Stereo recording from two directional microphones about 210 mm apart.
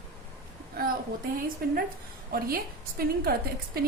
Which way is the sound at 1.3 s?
45° right (ahead or behind).